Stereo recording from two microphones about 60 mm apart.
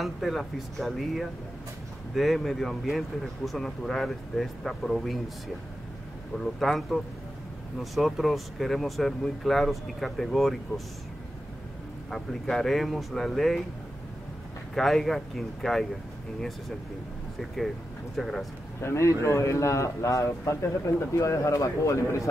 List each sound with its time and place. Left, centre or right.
0.0 s speech: centre
6.4 s speech: centre
12.1 s speech: centre
14.7 s speech: centre
18.1 s speech: centre
18.8 s speech: left